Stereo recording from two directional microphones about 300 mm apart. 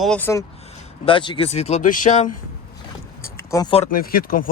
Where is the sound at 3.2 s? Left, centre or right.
Centre; by 4.5 s left.